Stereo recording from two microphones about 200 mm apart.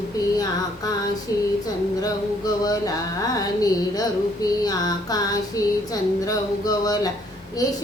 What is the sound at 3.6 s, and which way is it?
Female singing, 20° left (ahead or behind).